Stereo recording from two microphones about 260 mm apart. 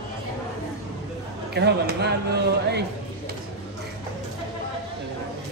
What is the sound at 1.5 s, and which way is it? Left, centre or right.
Speech, right.